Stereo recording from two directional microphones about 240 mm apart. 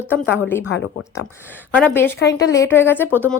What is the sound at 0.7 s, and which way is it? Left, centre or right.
Speech, left.